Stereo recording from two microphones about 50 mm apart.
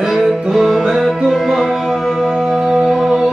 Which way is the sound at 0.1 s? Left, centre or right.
Centre.